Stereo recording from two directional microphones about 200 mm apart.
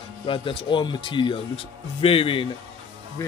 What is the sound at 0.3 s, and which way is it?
Speech, 25° left (ahead or behind).